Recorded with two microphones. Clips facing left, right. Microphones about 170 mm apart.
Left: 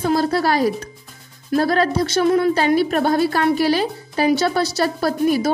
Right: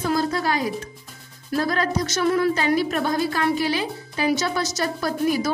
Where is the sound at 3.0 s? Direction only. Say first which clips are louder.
Left 5 dB; 65° left (ahead or behind).